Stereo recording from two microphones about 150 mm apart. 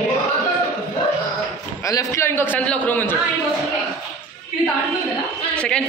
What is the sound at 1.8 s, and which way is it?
A man's voice, 20° left (ahead or behind).